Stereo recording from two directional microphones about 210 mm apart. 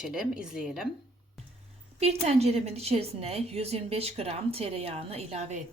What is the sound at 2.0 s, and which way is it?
A woman's voice, 30° right (ahead or behind).